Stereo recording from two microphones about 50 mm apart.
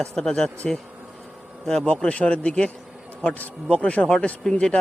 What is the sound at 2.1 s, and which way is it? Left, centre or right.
Speech, left.